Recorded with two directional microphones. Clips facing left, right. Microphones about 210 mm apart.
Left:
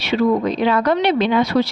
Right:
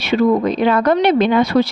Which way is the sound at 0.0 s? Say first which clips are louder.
Right 2 dB; 50° right (ahead or behind).